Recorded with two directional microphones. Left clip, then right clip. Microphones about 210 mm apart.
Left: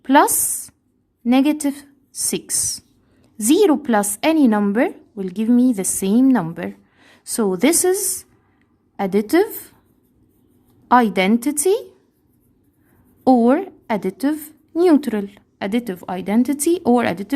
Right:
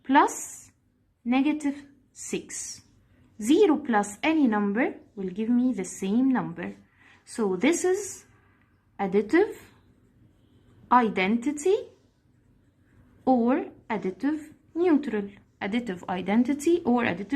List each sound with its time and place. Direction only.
0.0 s a sound: 60° left (ahead or behind)
1.2 s a woman's voice: 65° left (ahead or behind)
3.4 s a woman's voice: 60° left (ahead or behind)
9.0 s a woman's voice: 60° left (ahead or behind)
10.8 s a woman's voice: 60° left (ahead or behind)
13.2 s a woman's voice: 65° left (ahead or behind)